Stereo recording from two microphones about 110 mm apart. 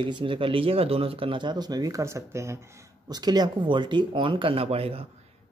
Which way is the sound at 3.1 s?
40° right (ahead or behind).